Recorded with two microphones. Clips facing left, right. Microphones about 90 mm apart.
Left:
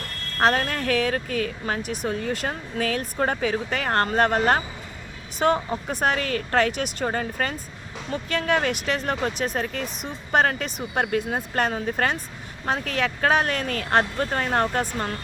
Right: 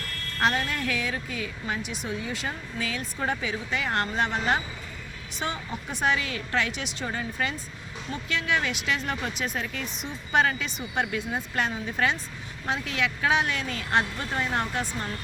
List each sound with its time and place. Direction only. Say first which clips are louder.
0.3 s speech: left 5 dB; 50° left (ahead or behind)